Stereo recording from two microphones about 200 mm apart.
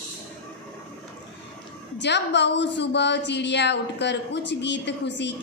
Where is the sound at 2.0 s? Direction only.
60° left (ahead or behind).